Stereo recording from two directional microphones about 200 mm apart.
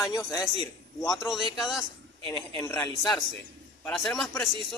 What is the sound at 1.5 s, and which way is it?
Speech, centre (ahead or behind).